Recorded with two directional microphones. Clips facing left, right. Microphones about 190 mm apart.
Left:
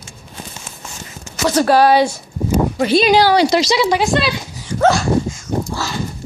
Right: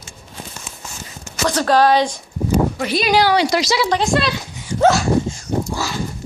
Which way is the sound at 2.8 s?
30° left (ahead or behind).